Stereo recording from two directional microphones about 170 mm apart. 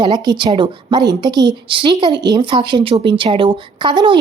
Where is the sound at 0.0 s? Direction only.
25° right (ahead or behind).